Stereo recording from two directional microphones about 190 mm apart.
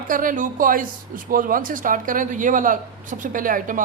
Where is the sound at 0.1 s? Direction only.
45° right (ahead or behind).